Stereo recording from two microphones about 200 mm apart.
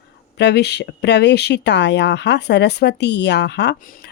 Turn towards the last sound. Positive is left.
turn(degrees=45)  # may be behind; listen again after turning